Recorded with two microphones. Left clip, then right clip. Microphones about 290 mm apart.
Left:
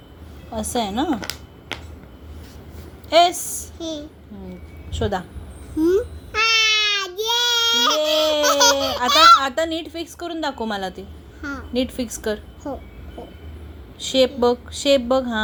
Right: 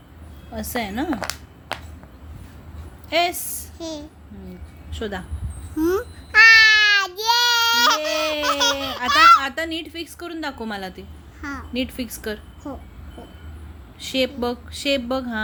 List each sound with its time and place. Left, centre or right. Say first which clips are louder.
0.7 s a woman's voice: left 3 dB; centre
3.1 s a woman's voice: left 6 dB; centre
4.9 s a woman's voice: left 6 dB; centre
5.7 s babbling: left 3 dB; right
9.0 s speech: left 1 dB; centre
9.6 s a woman's voice: left 4 dB; centre
12.7 s speech: left 4 dB; right
14.0 s a woman's voice: left 6 dB; centre